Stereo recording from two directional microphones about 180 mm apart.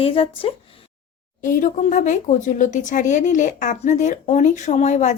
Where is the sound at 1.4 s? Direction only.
45° left (ahead or behind).